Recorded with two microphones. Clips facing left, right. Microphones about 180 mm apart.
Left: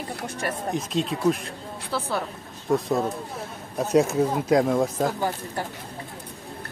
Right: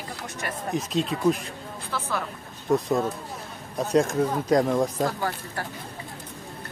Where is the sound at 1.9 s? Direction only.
35° left (ahead or behind).